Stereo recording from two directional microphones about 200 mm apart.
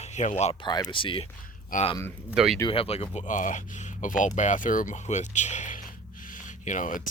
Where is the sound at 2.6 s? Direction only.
30° left (ahead or behind).